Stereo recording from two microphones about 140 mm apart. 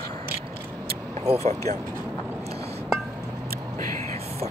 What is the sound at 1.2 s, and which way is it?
Speech, 45° right (ahead or behind).